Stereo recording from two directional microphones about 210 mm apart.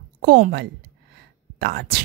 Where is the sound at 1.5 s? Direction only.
50° right (ahead or behind).